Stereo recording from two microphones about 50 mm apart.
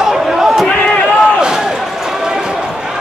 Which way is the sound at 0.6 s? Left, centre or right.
Centre.